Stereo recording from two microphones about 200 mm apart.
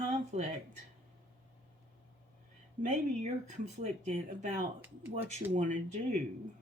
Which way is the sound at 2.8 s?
35° right (ahead or behind).